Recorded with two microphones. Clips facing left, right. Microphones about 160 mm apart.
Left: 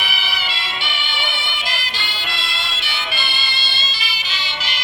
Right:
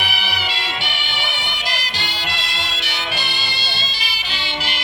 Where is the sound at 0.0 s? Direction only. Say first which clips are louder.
Right 2 dB; 65° right (ahead or behind).